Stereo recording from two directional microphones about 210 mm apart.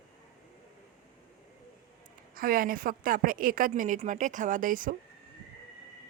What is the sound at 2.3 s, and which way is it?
Speech, 45° right (ahead or behind).